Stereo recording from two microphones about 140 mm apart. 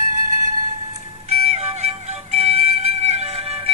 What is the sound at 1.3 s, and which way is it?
Music, 50° right (ahead or behind).